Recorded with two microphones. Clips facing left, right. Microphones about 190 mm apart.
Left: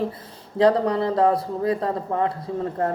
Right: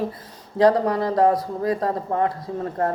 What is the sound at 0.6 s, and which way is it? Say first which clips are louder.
Speech: right 1 dB; 25° left (ahead or behind).